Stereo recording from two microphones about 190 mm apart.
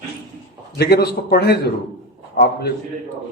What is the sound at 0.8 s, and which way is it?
A man's voice, 55° left (ahead or behind).